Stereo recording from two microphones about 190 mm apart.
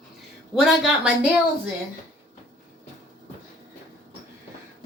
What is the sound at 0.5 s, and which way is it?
Speech, centre (ahead or behind).